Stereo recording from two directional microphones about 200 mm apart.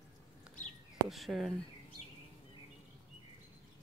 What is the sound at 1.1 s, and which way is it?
Speech, centre (ahead or behind).